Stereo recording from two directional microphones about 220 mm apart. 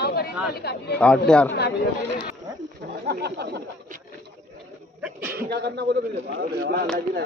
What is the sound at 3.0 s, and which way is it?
Speech, 50° right (ahead or behind).